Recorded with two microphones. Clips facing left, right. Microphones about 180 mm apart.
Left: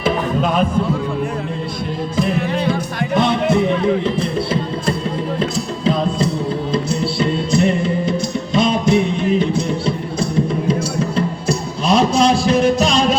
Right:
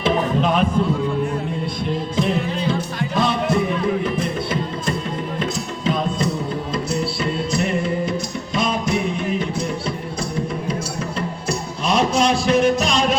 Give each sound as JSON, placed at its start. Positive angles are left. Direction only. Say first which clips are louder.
{"t": 0.0, "sound": "a sound", "louder": "left 1 dB", "side_deg": 10}
{"t": 2.5, "sound": "music", "louder": "left 3 dB", "side_deg": 65}
{"t": 3.2, "sound": "music", "louder": "left 4 dB", "side_deg": 25}